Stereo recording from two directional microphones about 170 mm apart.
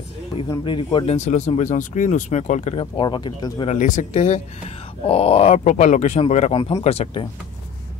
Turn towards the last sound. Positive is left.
turn(degrees=40)  # may be behind; listen again after turning